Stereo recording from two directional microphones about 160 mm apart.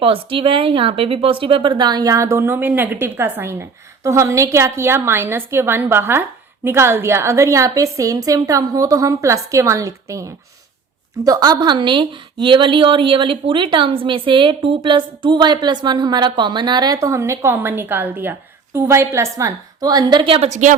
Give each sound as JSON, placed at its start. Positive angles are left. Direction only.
{"t": 0.0, "sound": "a woman's voice", "side_deg": -35}